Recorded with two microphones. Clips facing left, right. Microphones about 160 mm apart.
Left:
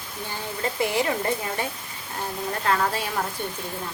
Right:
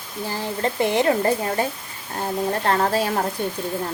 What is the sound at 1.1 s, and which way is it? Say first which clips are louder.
A woman's voice: right 6 dB; 40° right (ahead or behind).